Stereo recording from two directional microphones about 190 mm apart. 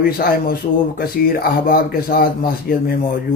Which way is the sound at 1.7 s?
50° left (ahead or behind).